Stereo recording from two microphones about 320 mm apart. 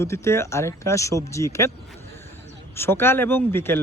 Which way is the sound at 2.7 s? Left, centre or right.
Centre.